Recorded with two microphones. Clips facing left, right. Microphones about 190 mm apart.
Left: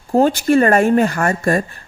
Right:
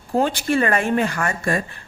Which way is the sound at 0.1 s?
45° left (ahead or behind).